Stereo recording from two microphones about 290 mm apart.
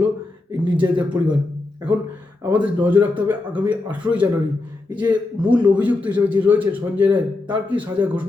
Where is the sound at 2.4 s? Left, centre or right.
Centre.